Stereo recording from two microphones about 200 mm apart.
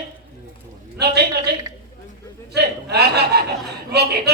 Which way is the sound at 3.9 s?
55° right (ahead or behind).